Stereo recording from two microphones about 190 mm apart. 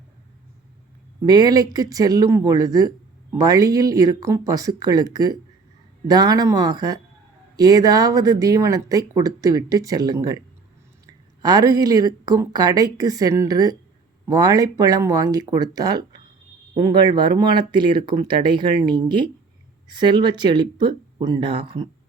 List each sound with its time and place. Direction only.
1.2 s speech: 20° right (ahead or behind)